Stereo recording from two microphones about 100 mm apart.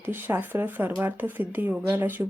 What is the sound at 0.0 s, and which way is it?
Speech, 20° right (ahead or behind).